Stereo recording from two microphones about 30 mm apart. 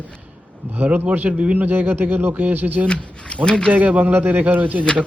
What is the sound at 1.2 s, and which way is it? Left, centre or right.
Speech, right.